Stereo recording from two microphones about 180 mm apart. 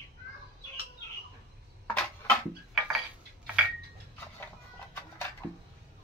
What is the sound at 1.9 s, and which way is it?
Tick-tock, 10° left (ahead or behind).